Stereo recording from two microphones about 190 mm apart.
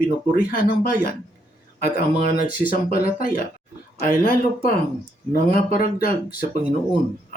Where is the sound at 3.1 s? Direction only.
50° left (ahead or behind).